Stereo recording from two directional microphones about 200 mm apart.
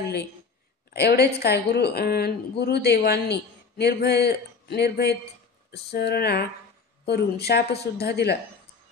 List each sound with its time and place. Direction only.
0.9 s a woman's voice: 55° left (ahead or behind)